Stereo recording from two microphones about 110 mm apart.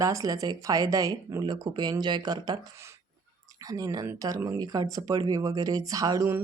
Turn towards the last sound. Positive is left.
turn(degrees=-30)  # may be behind; listen again after turning